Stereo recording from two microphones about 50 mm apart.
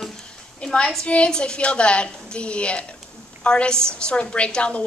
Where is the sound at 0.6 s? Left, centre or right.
Centre.